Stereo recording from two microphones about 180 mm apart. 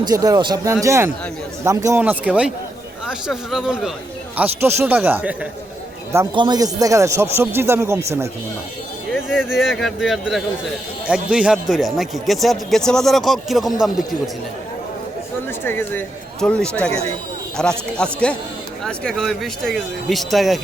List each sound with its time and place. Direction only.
0.0 s a man's voice: 20° right (ahead or behind)
6.3 s speech: 25° right (ahead or behind)
9.1 s a man's voice: 5° right (ahead or behind)
15.4 s a man's voice: 10° left (ahead or behind)